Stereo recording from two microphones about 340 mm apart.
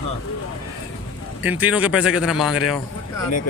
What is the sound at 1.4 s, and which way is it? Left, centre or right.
Speech, centre.